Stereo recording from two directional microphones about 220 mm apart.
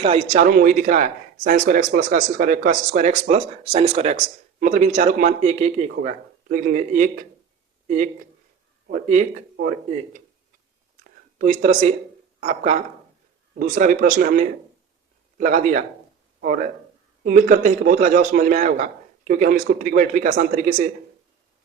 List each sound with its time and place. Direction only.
0.0 s speech: 25° right (ahead or behind)
0.4 s speech: 40° right (ahead or behind)
11.0 s a sound: 35° right (ahead or behind)
12.4 s speech: 30° right (ahead or behind)